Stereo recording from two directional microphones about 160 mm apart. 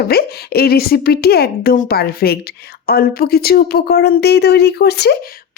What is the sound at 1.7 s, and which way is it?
Speech, 65° left (ahead or behind).